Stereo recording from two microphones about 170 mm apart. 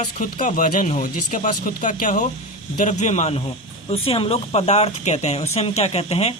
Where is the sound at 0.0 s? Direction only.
50° left (ahead or behind).